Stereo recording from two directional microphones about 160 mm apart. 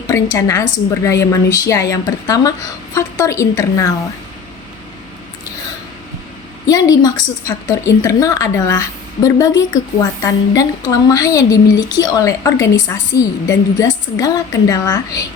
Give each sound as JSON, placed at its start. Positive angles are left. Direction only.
{"t": 0.1, "sound": "a woman's voice", "side_deg": 20}
{"t": 6.7, "sound": "a woman's voice", "side_deg": 20}